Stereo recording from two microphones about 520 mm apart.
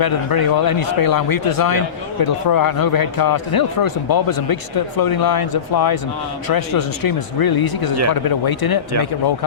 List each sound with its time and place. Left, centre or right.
0.0 s a man's voice: left